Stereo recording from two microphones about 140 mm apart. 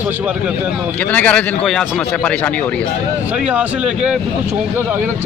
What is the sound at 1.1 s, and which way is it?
A man's voice, 10° left (ahead or behind).